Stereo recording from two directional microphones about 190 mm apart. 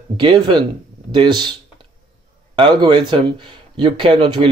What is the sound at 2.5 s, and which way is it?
Speech, 25° right (ahead or behind).